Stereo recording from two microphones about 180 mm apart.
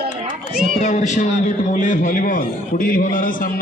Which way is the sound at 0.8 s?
40° left (ahead or behind).